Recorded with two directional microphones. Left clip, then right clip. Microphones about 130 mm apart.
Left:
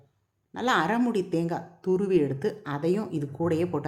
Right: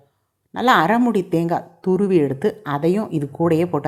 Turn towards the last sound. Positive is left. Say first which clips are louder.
# right 8 dB
turn(degrees=-35)  # may be behind; listen again after turning